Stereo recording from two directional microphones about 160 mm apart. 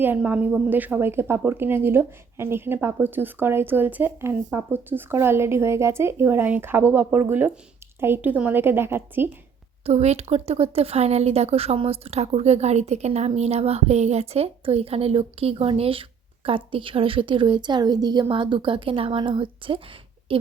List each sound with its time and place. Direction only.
0.0 s speech: 10° right (ahead or behind)
9.8 s a woman's voice: 40° right (ahead or behind)